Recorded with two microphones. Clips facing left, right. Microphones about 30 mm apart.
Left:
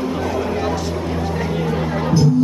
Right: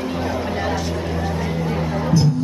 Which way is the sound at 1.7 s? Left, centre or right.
Left.